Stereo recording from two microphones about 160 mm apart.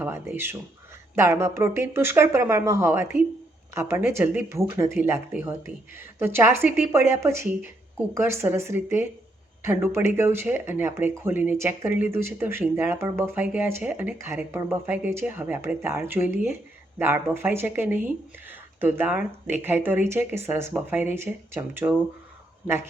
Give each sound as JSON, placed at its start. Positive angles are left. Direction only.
{"t": 0.0, "sound": "speech", "side_deg": -15}